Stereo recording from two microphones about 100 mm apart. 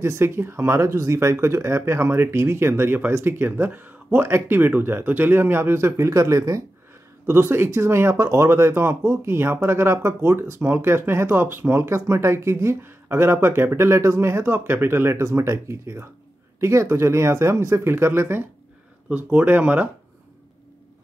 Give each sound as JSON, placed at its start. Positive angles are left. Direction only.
{"t": 0.0, "sound": "speech", "side_deg": -25}